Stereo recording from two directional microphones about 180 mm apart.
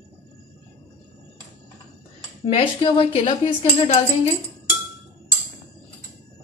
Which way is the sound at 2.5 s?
30° left (ahead or behind).